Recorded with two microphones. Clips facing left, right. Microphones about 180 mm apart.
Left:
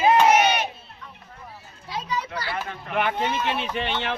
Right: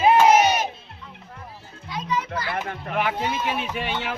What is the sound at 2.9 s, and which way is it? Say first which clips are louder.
Speech: left 1 dB; 5° right (ahead or behind).